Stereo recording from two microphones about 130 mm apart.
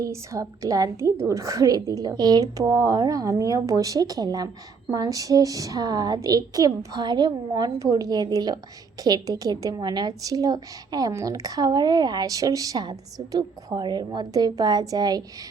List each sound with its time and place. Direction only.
0.0 s a woman's voice: 25° right (ahead or behind)